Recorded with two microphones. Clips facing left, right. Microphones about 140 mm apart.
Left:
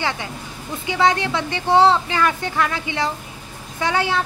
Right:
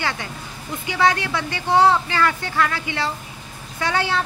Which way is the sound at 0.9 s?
20° left (ahead or behind).